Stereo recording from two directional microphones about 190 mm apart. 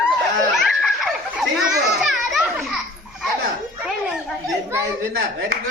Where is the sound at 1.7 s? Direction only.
5° right (ahead or behind).